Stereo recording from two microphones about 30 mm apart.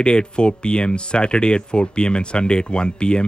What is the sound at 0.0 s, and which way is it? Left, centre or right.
Speech, left.